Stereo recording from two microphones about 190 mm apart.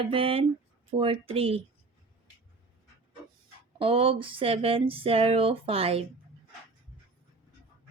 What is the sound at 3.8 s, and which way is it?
Speech, 30° right (ahead or behind).